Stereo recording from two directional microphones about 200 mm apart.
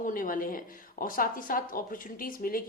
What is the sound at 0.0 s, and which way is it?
Speech, 45° left (ahead or behind).